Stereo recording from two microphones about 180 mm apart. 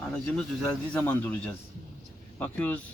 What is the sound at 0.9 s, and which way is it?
A man's voice, 10° left (ahead or behind).